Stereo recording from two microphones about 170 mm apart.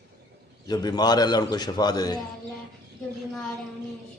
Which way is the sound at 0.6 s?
25° left (ahead or behind).